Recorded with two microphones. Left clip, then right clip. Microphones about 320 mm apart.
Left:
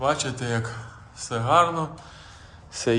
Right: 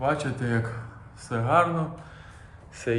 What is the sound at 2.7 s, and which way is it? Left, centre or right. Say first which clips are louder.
Speech: left 4 dB; centre.